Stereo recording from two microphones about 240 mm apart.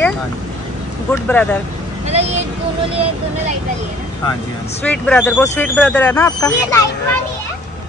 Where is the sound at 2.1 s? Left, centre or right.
Right.